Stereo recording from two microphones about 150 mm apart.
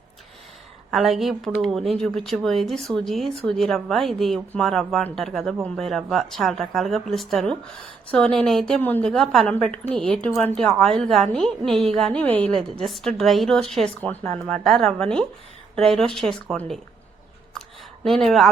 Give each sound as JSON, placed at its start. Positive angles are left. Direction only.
{"t": 0.9, "sound": "speech", "side_deg": 0}
{"t": 18.0, "sound": "speech", "side_deg": 0}